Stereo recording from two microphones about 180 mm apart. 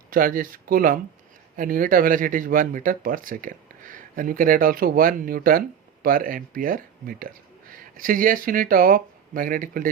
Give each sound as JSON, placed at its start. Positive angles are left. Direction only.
{"t": 0.1, "sound": "speech", "side_deg": -50}